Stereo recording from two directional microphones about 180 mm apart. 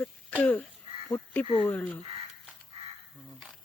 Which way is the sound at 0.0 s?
10° left (ahead or behind).